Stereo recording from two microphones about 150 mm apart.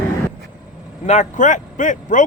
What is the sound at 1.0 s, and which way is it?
Speech, 55° left (ahead or behind).